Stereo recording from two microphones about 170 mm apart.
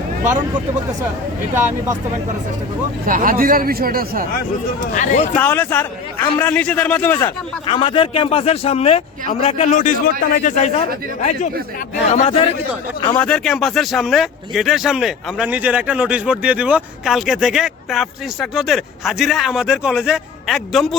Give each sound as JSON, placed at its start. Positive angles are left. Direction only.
{"t": 1.5, "sound": "speech", "side_deg": -15}
{"t": 3.1, "sound": "speech", "side_deg": -55}
{"t": 4.8, "sound": "a man's voice", "side_deg": 50}
{"t": 5.3, "sound": "a man's voice", "side_deg": 10}
{"t": 7.7, "sound": "a man's voice", "side_deg": 30}
{"t": 13.1, "sound": "speech", "side_deg": 5}